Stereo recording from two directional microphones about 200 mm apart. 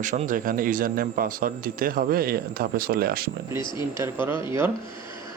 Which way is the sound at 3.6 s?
25° left (ahead or behind).